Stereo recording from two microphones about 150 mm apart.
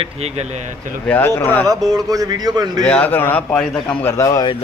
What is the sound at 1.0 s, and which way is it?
Speech, 10° left (ahead or behind).